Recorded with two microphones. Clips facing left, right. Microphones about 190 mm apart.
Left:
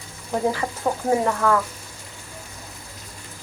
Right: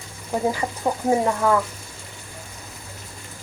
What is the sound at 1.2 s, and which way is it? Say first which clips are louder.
Speech: right 1 dB; 15° right (ahead or behind).